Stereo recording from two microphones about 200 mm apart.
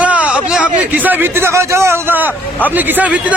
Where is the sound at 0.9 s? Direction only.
10° right (ahead or behind).